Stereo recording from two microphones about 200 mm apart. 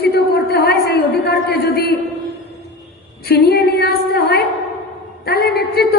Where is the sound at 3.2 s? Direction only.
50° left (ahead or behind).